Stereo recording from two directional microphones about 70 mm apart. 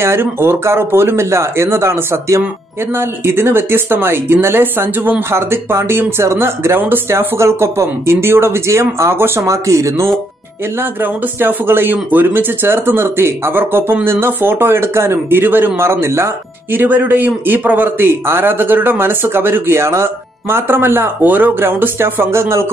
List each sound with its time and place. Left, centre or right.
0.0 s a man's voice: right
10.8 s a man's voice: right
16.7 s a man's voice: right